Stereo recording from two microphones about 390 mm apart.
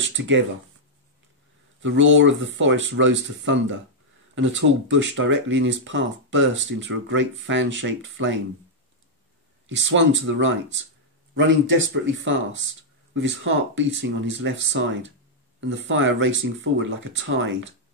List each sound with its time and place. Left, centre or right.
0.2 s speech: right
1.8 s speech: right
9.7 s speech: right